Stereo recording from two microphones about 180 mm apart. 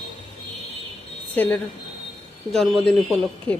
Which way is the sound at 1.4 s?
10° left (ahead or behind).